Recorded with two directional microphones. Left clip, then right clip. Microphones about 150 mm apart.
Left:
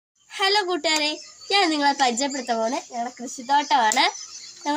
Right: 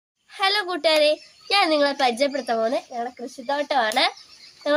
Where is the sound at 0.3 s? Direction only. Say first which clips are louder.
Left 1 dB; 20° right (ahead or behind).